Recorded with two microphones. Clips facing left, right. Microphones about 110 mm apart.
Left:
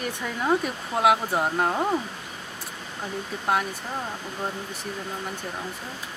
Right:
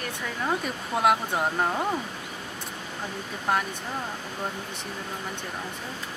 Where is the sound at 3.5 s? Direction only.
Centre (ahead or behind).